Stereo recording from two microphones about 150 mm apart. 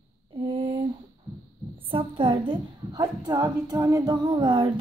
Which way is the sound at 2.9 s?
25° right (ahead or behind).